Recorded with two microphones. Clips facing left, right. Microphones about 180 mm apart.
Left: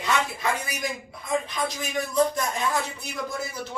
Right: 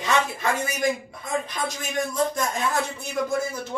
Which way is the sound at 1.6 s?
45° right (ahead or behind).